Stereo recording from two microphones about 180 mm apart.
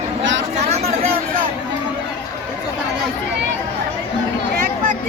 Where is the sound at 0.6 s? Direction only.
40° right (ahead or behind).